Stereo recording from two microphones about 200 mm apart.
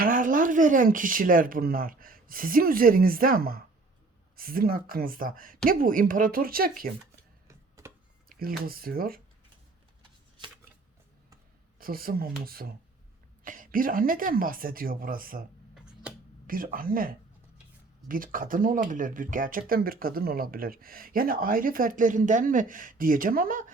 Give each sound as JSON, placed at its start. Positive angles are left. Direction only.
{"t": 0.0, "sound": "speech", "side_deg": -45}
{"t": 7.4, "sound": "a sound", "side_deg": -15}
{"t": 8.3, "sound": "speech", "side_deg": -45}
{"t": 10.0, "sound": "shuffling cards", "side_deg": -25}
{"t": 11.8, "sound": "speech", "side_deg": -45}
{"t": 16.5, "sound": "speech", "side_deg": -45}